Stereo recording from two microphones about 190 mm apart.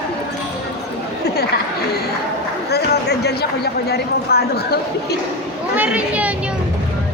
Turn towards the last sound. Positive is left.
turn(degrees=-5)  # may be behind; listen again after turning